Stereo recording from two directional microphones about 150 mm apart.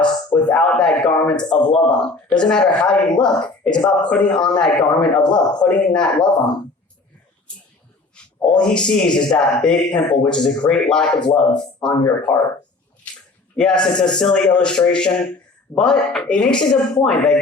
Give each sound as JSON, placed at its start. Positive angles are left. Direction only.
{"t": 0.3, "sound": "a sound", "side_deg": 30}
{"t": 0.5, "sound": "speech", "side_deg": 5}
{"t": 8.1, "sound": "speech", "side_deg": 5}
{"t": 13.6, "sound": "speech", "side_deg": 5}